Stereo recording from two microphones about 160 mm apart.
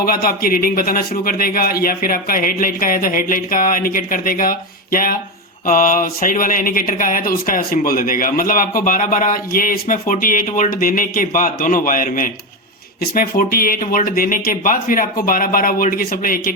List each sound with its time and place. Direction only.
0.0 s speech: 65° left (ahead or behind)